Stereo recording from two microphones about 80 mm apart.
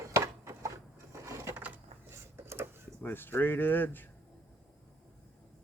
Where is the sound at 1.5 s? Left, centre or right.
Right.